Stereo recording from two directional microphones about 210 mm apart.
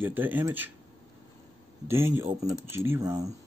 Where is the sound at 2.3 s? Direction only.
25° right (ahead or behind).